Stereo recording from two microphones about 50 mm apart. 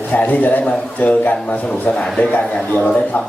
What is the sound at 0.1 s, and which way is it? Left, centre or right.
A man's voice, left.